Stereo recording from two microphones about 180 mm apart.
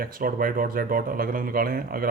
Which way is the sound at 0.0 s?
50° right (ahead or behind).